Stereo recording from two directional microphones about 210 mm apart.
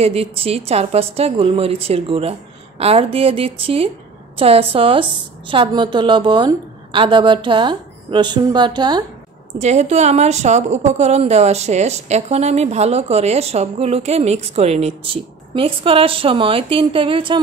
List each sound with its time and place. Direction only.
0.0 s a woman's voice: 30° right (ahead or behind)
9.6 s a woman's voice: 30° right (ahead or behind)